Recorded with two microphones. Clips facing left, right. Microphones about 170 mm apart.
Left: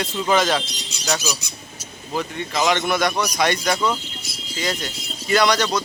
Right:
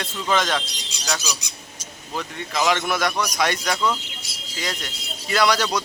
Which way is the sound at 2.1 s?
Centre (ahead or behind).